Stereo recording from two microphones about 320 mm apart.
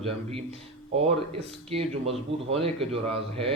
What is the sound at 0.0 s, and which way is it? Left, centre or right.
Speech, centre.